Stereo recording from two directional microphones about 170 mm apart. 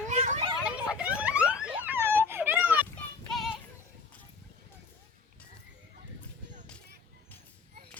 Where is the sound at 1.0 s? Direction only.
10° right (ahead or behind).